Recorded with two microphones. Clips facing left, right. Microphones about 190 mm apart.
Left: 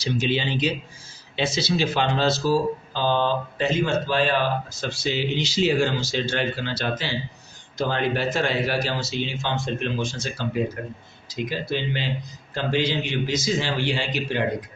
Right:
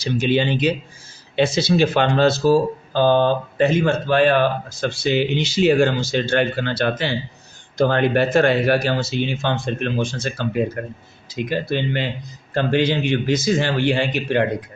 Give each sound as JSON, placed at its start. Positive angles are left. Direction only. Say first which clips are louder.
{"t": 0.0, "sound": "speech", "louder": "right 5 dB", "side_deg": -55}